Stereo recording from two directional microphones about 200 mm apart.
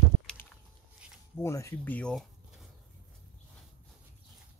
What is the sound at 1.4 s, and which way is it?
Speech, 15° left (ahead or behind).